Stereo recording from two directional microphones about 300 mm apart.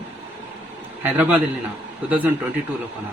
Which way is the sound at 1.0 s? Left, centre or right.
Centre.